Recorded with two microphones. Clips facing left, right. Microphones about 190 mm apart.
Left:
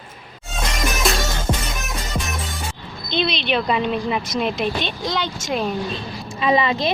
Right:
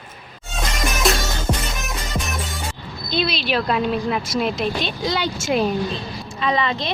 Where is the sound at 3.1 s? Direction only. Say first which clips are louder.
Left 1 dB; 5° right (ahead or behind).